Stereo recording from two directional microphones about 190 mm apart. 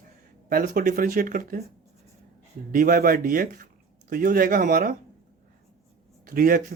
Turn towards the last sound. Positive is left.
turn(degrees=-50)  # may be behind; listen again after turning